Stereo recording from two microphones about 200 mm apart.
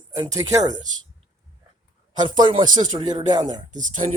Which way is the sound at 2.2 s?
25° right (ahead or behind).